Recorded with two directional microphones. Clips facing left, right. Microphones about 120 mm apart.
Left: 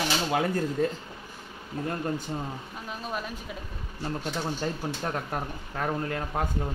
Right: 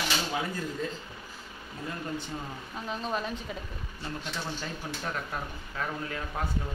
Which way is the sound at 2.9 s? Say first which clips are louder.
Right 2 dB; 5° left (ahead or behind).